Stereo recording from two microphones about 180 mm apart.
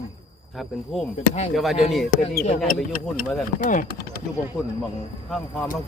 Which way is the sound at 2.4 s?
50° left (ahead or behind).